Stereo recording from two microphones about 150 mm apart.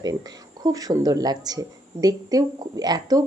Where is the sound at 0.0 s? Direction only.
25° right (ahead or behind).